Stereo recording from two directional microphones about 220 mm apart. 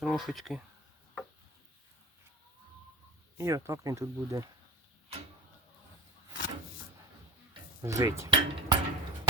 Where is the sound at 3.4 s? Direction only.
15° right (ahead or behind).